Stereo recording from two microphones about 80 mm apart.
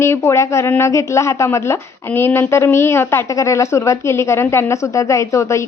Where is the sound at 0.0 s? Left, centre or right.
Left.